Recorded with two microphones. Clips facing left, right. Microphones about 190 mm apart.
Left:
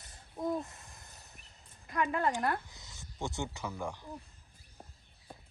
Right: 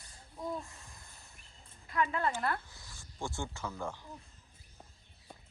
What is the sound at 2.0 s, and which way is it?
Speech, 15° left (ahead or behind).